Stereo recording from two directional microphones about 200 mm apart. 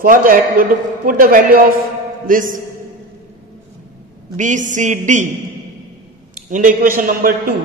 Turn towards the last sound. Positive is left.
turn(degrees=-45)  # may be behind; listen again after turning